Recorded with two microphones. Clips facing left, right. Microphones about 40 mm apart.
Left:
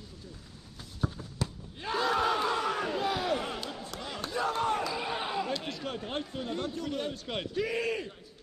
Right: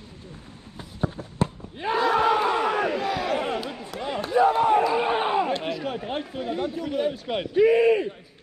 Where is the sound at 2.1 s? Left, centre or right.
Right.